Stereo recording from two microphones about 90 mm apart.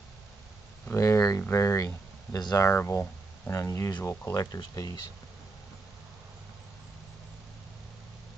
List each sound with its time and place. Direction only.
0.8 s speech: 35° left (ahead or behind)
4.3 s speech: 40° left (ahead or behind)